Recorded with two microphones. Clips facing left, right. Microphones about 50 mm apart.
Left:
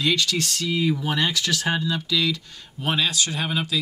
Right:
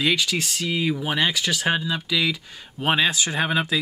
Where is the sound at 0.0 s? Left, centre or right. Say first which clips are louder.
Even; centre.